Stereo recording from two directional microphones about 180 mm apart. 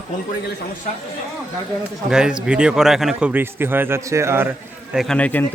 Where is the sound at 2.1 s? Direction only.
5° right (ahead or behind).